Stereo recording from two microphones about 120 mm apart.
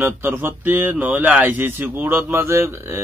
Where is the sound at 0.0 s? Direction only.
15° right (ahead or behind).